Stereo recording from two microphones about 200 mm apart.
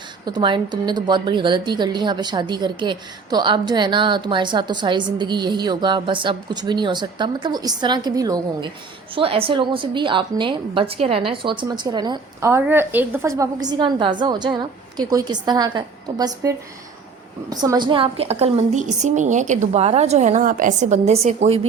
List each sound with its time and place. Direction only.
0.3 s a woman's voice: 25° right (ahead or behind)